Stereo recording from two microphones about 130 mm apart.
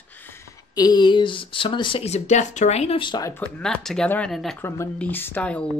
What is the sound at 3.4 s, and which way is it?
Speech, 5° left (ahead or behind).